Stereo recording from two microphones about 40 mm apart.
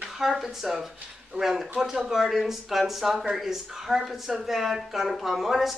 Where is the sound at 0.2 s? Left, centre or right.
Centre.